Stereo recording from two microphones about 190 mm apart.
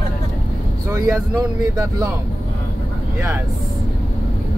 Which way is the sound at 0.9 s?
15° right (ahead or behind).